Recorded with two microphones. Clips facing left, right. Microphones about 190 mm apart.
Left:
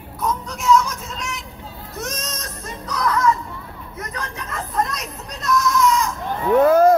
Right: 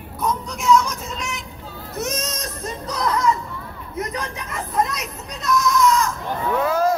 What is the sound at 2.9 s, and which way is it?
Speech, 25° right (ahead or behind).